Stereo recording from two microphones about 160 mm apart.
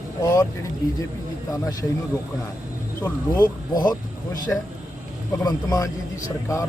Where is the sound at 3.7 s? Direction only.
25° left (ahead or behind).